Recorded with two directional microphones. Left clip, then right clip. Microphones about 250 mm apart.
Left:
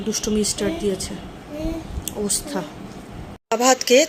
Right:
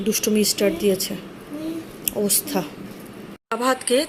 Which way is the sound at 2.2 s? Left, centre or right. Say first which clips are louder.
Right 1 dB; centre.